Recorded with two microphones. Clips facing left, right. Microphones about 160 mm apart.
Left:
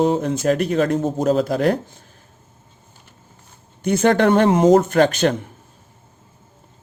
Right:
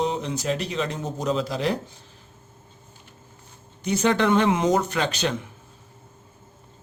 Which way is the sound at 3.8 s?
55° left (ahead or behind).